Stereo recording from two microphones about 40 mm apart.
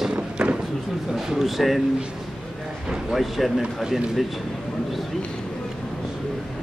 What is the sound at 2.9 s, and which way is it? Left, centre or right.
Speech, centre.